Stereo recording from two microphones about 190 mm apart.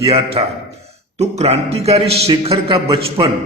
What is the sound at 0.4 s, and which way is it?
A man's voice, 30° right (ahead or behind).